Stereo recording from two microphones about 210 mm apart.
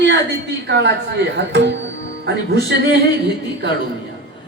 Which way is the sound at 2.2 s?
55° right (ahead or behind).